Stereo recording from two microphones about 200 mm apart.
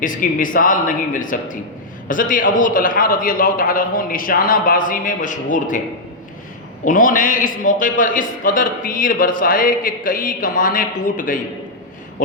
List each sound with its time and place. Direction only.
0.0 s a man's voice: 40° left (ahead or behind)
6.8 s a man's voice: 40° left (ahead or behind)